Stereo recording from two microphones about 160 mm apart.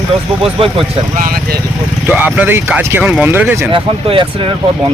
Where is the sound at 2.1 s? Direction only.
10° right (ahead or behind).